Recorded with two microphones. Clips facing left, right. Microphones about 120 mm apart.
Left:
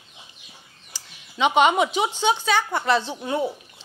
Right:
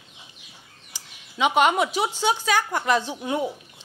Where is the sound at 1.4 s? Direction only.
Centre (ahead or behind).